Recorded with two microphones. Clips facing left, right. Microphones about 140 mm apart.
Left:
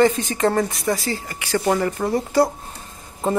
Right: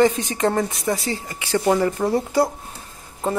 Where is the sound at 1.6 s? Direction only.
10° right (ahead or behind).